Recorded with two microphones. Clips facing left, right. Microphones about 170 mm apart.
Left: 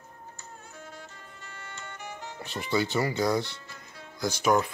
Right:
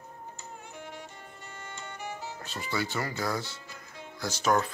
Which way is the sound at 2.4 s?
15° left (ahead or behind).